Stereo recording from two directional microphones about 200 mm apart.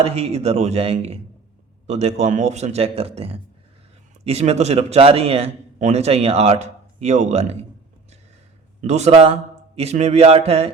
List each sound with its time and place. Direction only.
0.0 s a man's voice: 30° right (ahead or behind)
8.8 s a man's voice: 35° right (ahead or behind)